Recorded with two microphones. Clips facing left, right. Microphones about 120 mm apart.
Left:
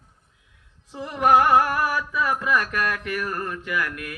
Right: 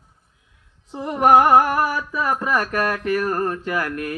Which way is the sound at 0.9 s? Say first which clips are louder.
Right 4 dB; 35° right (ahead or behind).